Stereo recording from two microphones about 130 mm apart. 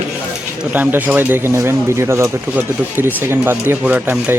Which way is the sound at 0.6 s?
15° right (ahead or behind).